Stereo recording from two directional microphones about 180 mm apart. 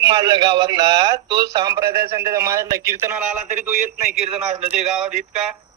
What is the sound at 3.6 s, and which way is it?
Speech, 45° right (ahead or behind).